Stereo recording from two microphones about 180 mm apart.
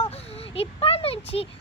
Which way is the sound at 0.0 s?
35° left (ahead or behind).